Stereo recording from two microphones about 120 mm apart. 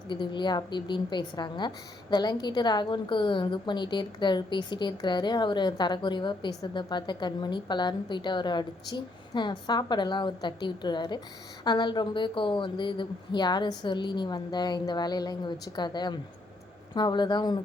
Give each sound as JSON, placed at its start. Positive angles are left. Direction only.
{"t": 0.1, "sound": "a woman's voice", "side_deg": 40}